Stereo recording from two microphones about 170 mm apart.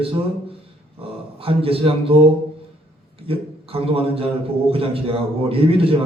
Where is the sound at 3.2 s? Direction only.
35° right (ahead or behind).